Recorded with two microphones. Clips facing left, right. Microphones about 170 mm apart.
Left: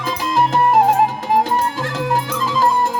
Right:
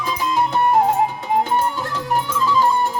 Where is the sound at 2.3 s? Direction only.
90° left.